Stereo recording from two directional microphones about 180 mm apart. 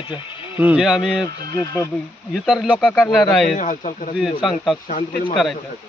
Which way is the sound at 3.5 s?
45° left (ahead or behind).